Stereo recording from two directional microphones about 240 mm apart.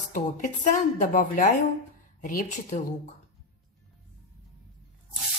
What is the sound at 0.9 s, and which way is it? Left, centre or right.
Speech, left.